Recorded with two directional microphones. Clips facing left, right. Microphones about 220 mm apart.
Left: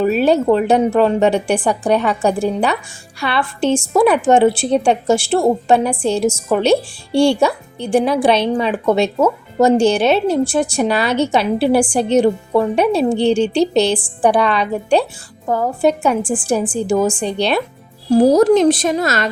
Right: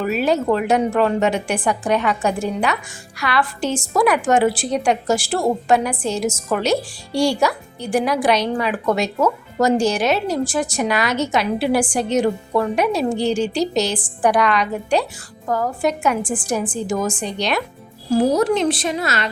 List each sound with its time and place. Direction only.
0.0 s a woman's voice: 30° left (ahead or behind); by 19.3 s 45° left (ahead or behind)